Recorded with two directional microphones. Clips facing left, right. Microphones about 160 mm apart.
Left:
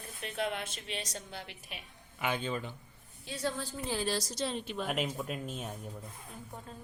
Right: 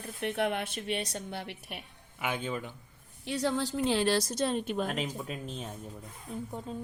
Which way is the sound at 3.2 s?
70° right (ahead or behind).